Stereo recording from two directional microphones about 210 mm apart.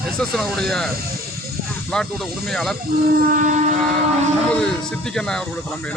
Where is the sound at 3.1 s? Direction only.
45° right (ahead or behind).